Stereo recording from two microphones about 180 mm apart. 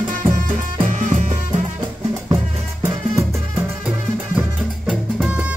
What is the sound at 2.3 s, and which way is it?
Music, 10° right (ahead or behind).